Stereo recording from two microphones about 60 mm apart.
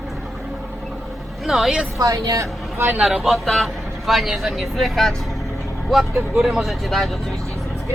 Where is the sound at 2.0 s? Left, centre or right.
Right.